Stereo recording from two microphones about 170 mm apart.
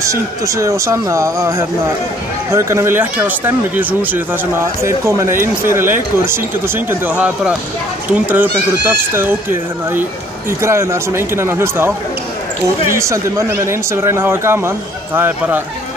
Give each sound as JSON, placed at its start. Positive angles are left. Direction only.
{"t": 0.0, "sound": "speech", "side_deg": -20}
{"t": 12.9, "sound": "speech", "side_deg": -15}